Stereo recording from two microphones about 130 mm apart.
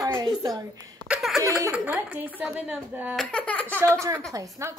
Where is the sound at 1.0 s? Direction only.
5° right (ahead or behind).